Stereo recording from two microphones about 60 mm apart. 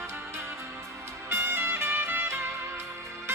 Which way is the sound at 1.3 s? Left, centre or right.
Right.